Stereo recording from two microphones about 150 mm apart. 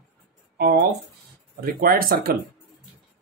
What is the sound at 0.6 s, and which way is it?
Speech, 90° right.